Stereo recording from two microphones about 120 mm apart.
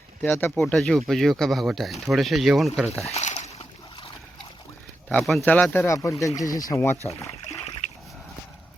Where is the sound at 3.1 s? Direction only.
70° left (ahead or behind).